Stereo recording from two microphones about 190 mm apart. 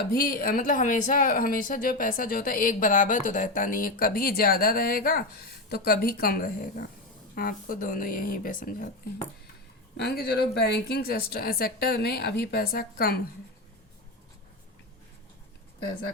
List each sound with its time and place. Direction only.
0.2 s speech: 50° left (ahead or behind)
10.0 s speech: 55° left (ahead or behind)